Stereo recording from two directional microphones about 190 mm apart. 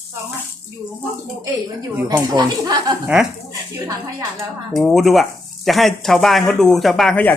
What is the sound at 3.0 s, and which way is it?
Speech, 5° right (ahead or behind).